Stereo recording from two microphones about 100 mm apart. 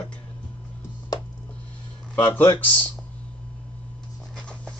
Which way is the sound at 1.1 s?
40° left (ahead or behind).